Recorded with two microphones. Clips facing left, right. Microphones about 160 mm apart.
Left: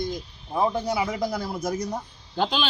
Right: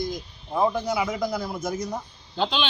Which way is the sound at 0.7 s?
30° left (ahead or behind).